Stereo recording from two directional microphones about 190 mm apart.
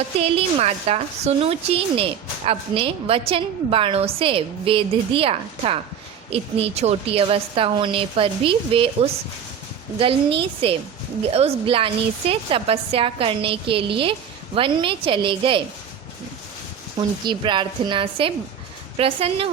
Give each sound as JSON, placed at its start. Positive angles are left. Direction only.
{"t": 0.2, "sound": "a woman's voice", "side_deg": -30}
{"t": 17.0, "sound": "a woman's voice", "side_deg": -25}